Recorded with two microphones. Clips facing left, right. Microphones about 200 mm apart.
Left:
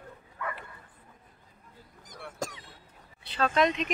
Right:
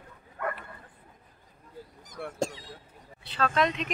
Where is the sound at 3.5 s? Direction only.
Centre (ahead or behind).